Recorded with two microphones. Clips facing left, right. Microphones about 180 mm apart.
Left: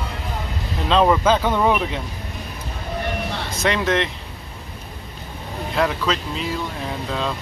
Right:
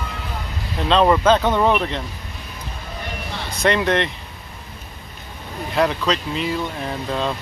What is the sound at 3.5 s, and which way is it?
Speech, centre (ahead or behind).